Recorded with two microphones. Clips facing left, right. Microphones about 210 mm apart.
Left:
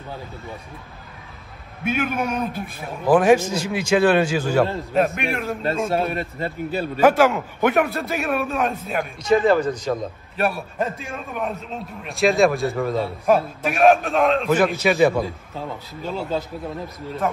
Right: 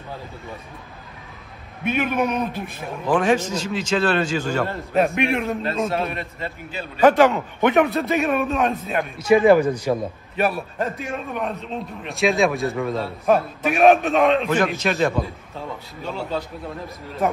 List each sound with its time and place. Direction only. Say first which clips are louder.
1.9 s a man's voice: right 2 dB; centre (ahead or behind)
5.9 s a man's voice: left 2 dB; 30° left (ahead or behind)
7.0 s a man's voice: right 2 dB; 5° left (ahead or behind)
9.3 s a man's voice: right 3 dB; 10° right (ahead or behind)
10.3 s a man's voice: right 1 dB; centre (ahead or behind)